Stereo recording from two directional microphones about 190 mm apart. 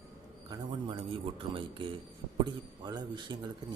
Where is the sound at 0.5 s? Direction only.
25° right (ahead or behind).